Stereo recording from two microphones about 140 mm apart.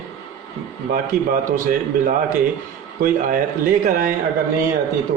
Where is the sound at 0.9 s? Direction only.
70° right (ahead or behind).